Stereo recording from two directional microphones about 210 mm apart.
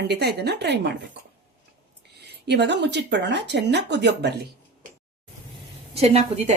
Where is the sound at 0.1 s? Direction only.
50° right (ahead or behind).